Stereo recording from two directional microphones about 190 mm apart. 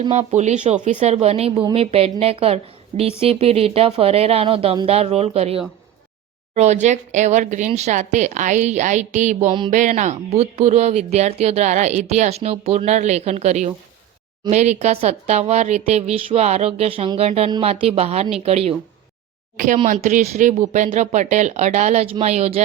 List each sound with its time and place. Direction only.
0.1 s speech: 35° right (ahead or behind)